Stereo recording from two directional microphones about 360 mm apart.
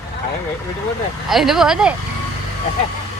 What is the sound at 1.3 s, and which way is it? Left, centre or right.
Speech, centre.